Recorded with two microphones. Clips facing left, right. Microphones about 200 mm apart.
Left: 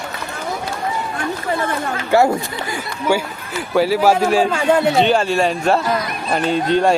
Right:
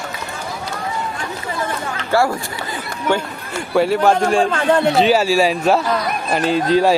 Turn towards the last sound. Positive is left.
turn(degrees=0)  # may be behind; listen again after turning